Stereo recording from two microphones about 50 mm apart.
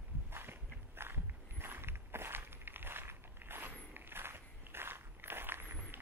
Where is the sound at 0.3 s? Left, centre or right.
Right.